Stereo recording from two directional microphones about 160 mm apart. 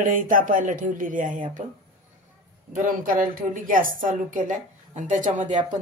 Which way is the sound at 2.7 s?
55° right (ahead or behind).